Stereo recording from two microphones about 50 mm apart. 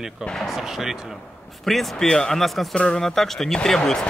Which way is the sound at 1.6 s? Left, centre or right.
Centre.